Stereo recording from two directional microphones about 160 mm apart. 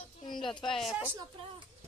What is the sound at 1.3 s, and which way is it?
Speech, 35° right (ahead or behind).